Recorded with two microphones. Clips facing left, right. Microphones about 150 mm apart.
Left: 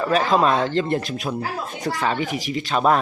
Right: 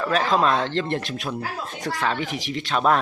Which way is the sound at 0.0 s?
5° left (ahead or behind).